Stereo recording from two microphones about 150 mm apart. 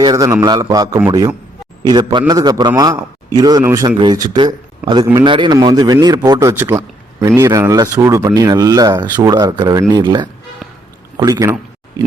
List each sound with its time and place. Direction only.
0.0 s a man's voice: 25° right (ahead or behind)
3.8 s a man's voice: 30° right (ahead or behind)